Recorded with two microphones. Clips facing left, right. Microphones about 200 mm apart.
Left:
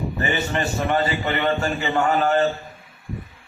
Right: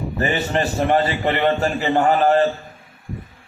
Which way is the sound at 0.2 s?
35° right (ahead or behind).